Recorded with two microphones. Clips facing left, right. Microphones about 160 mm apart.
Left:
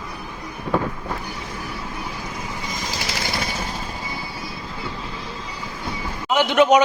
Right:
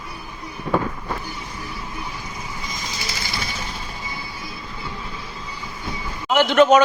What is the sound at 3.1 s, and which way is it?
Vehicle, 50° left (ahead or behind).